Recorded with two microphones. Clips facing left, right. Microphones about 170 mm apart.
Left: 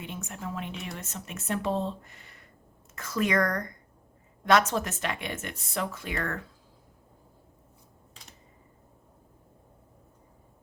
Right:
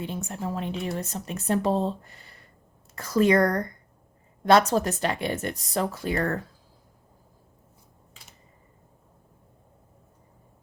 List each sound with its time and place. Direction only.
0.0 s speech: 35° right (ahead or behind)